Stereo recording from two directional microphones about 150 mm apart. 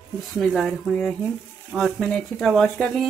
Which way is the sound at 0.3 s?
Centre (ahead or behind).